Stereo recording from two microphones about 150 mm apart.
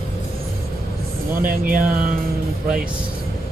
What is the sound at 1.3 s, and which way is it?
Speech, 70° right (ahead or behind).